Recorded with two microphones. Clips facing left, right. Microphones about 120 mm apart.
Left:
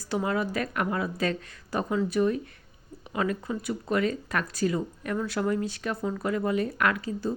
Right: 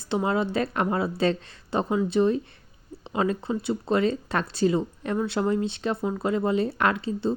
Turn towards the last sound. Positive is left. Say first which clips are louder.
# right 3 dB
turn(degrees=-25)  # may be behind; listen again after turning